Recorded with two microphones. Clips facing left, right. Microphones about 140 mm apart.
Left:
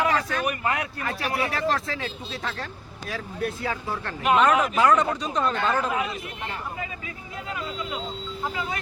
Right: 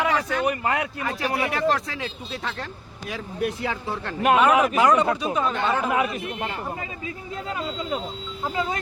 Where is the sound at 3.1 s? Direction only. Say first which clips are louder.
Right 2 dB; 15° right (ahead or behind).